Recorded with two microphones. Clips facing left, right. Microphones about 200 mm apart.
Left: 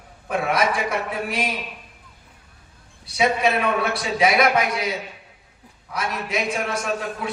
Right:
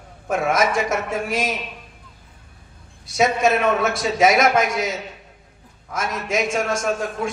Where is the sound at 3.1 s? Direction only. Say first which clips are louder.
Right 2 dB; 45° right (ahead or behind).